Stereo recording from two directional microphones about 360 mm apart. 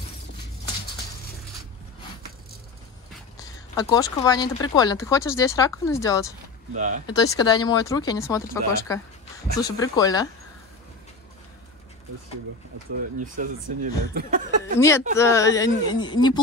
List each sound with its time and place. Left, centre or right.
3.7 s speech: centre
6.7 s speech: right
7.1 s speech: centre
13.4 s speech: right
14.1 s a sound: right
14.8 s speech: centre